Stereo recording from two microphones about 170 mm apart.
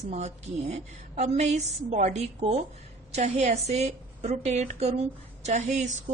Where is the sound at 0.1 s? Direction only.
40° right (ahead or behind).